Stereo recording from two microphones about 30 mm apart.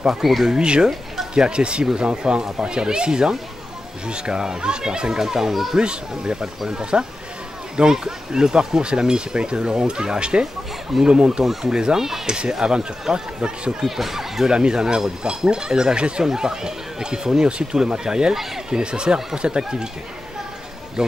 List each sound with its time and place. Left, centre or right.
0.2 s speech: centre
0.5 s speech: right
5.2 s speech: centre
5.8 s speech: right
10.4 s speech: centre
11.1 s speech: right
13.7 s speech: centre
14.5 s speech: right